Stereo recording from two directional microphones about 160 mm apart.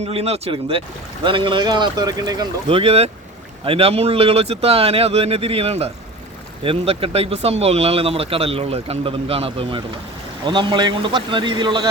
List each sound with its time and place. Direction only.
0.0 s a man's voice: 40° right (ahead or behind); by 2.5 s 25° right (ahead or behind)
2.6 s a man's voice: 35° right (ahead or behind)